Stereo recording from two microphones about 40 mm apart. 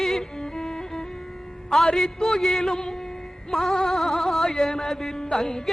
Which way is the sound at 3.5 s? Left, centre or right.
Centre.